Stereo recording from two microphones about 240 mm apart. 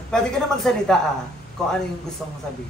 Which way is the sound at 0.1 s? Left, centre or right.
Centre.